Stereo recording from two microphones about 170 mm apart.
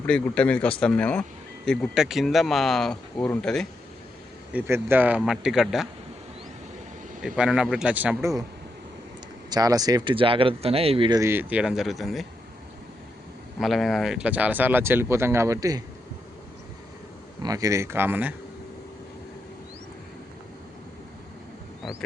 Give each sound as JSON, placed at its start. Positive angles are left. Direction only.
{"t": 0.1, "sound": "speech", "side_deg": 5}
{"t": 4.5, "sound": "speech", "side_deg": -10}
{"t": 7.2, "sound": "speech", "side_deg": -5}
{"t": 9.5, "sound": "speech", "side_deg": -20}
{"t": 11.2, "sound": "speech", "side_deg": -15}
{"t": 13.6, "sound": "speech", "side_deg": 0}
{"t": 17.4, "sound": "speech", "side_deg": -20}